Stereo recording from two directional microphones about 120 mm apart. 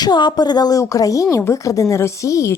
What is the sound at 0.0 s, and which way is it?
A woman's voice, 35° left (ahead or behind).